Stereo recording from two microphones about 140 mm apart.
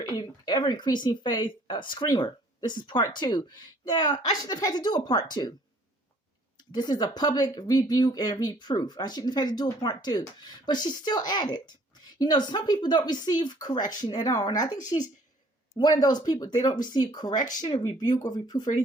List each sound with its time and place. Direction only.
0.1 s speech: 30° left (ahead or behind)
6.7 s speech: 30° left (ahead or behind)